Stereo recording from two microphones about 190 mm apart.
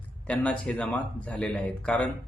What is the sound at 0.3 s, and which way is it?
Speech, 5° left (ahead or behind).